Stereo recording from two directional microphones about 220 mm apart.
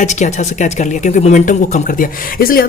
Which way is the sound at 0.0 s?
35° left (ahead or behind).